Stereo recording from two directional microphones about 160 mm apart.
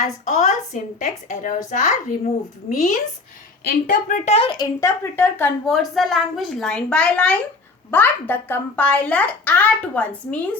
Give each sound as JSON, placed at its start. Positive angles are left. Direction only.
{"t": 0.0, "sound": "a woman's voice", "side_deg": 45}
{"t": 3.7, "sound": "a woman's voice", "side_deg": 60}
{"t": 4.4, "sound": "a woman's voice", "side_deg": 30}
{"t": 5.6, "sound": "a woman's voice", "side_deg": 0}